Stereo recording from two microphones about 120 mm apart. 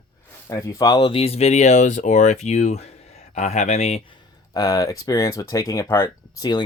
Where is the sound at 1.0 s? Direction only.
55° left (ahead or behind).